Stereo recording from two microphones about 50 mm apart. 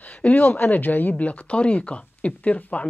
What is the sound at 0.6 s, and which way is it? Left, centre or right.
Speech, left.